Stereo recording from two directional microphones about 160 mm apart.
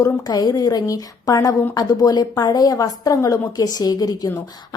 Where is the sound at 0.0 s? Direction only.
20° left (ahead or behind).